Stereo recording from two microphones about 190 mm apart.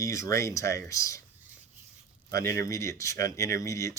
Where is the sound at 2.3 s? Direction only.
15° left (ahead or behind).